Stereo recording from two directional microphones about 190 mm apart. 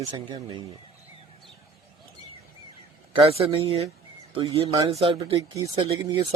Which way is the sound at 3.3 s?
30° right (ahead or behind).